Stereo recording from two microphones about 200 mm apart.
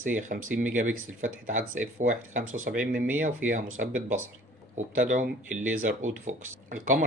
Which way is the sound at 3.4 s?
10° right (ahead or behind).